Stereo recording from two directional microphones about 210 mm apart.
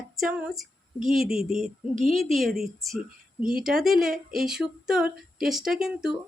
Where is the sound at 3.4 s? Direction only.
45° right (ahead or behind).